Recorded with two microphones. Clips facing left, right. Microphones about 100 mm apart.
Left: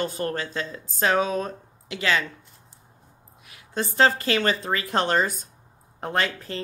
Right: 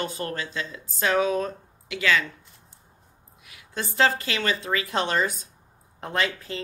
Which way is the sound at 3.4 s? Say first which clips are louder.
Left 4 dB; 35° left (ahead or behind).